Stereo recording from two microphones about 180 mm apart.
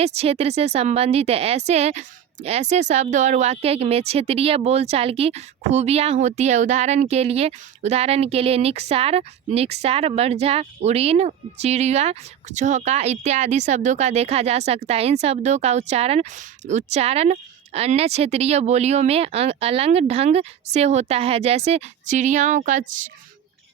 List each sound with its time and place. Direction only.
0.0 s speech: 35° right (ahead or behind)